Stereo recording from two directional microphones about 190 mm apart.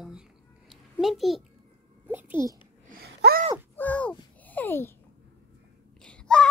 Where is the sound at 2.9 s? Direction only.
55° right (ahead or behind).